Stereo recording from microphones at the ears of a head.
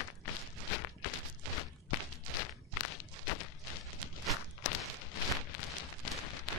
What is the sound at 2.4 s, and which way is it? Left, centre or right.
Walk, left.